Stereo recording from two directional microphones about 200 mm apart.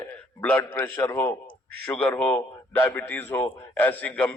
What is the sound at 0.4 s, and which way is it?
A man's voice, 10° left (ahead or behind).